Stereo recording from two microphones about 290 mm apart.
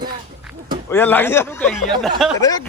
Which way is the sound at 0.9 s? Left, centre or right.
Centre.